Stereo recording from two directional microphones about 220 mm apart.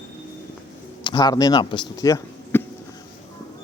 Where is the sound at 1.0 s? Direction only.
20° left (ahead or behind).